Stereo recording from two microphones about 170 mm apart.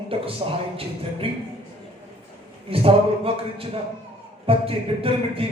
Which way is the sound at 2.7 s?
35° right (ahead or behind).